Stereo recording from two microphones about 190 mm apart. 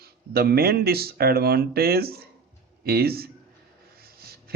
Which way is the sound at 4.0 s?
55° right (ahead or behind).